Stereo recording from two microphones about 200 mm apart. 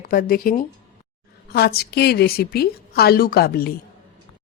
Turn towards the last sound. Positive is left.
turn(degrees=50)  # may be behind; listen again after turning